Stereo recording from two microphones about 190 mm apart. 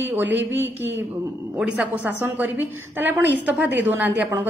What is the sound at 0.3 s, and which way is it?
Speech, 70° right (ahead or behind).